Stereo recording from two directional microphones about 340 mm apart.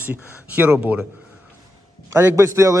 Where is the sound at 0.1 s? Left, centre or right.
Centre.